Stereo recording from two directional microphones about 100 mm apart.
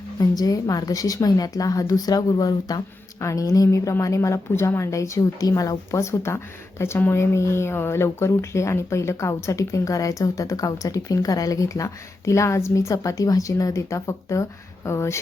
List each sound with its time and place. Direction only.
0.2 s a woman's voice: 40° left (ahead or behind)